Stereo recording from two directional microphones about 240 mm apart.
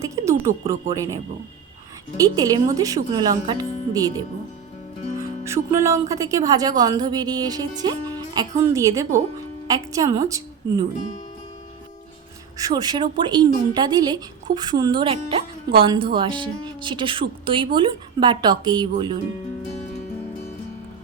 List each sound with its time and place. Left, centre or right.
0.0 s speech: centre
12.5 s speech: centre